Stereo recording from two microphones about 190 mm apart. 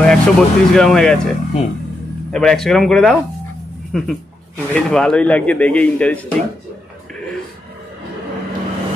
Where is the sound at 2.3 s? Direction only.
5° left (ahead or behind).